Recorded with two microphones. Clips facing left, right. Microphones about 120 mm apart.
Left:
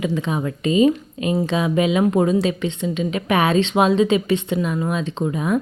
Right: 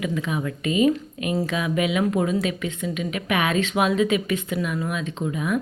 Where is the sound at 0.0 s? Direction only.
30° left (ahead or behind).